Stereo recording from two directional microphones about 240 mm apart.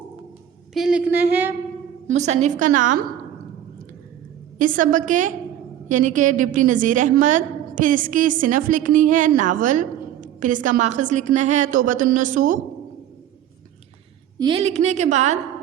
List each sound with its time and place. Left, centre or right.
0.7 s a woman's voice: centre
2.0 s a woman's voice: right
4.5 s a woman's voice: right
14.3 s a woman's voice: right